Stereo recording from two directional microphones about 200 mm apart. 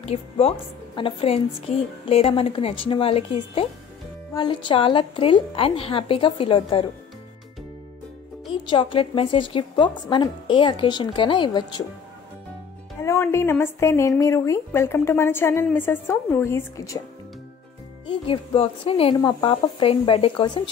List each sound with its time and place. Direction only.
0.0 s a woman's voice: 30° left (ahead or behind)
8.6 s a woman's voice: 25° left (ahead or behind)
13.0 s speech: 15° left (ahead or behind)
18.0 s a woman's voice: 30° left (ahead or behind)